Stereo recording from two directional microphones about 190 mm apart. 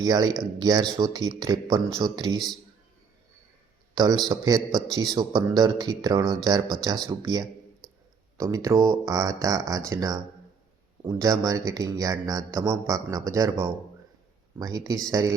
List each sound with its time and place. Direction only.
0.0 s speech: 20° right (ahead or behind)
3.9 s speech: 20° right (ahead or behind)